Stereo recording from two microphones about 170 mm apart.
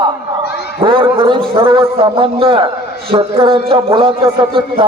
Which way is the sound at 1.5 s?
30° right (ahead or behind).